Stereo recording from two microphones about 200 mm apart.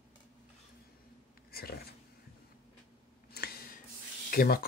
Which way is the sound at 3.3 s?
50° left (ahead or behind).